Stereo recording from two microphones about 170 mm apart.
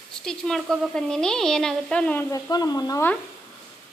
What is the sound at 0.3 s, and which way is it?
A woman's voice, 5° left (ahead or behind).